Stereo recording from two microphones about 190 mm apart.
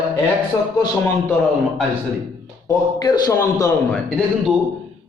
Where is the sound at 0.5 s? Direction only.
15° left (ahead or behind).